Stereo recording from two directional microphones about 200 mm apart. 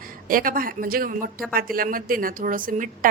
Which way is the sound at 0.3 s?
45° right (ahead or behind).